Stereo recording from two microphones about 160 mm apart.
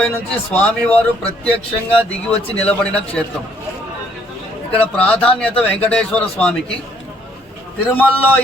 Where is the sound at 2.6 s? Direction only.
10° left (ahead or behind).